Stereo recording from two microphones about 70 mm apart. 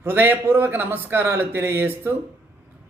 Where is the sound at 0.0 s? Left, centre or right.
Right.